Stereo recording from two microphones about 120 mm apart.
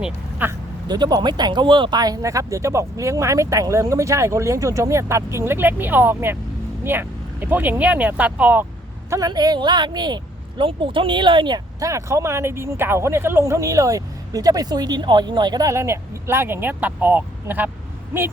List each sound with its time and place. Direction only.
0.0 s speech: 15° right (ahead or behind)
0.9 s speech: 35° right (ahead or behind); by 8.6 s 10° right (ahead or behind)
9.0 s a woman's voice: 30° right (ahead or behind)